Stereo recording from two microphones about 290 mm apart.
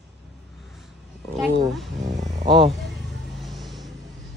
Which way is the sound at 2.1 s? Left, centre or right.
Right.